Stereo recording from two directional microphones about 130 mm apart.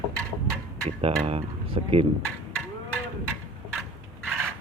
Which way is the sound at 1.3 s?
50° right (ahead or behind).